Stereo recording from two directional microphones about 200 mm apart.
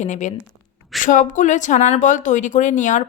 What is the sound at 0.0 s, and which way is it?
Speech, 35° left (ahead or behind).